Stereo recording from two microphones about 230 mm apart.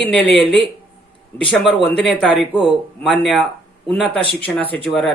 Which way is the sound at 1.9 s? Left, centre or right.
Centre.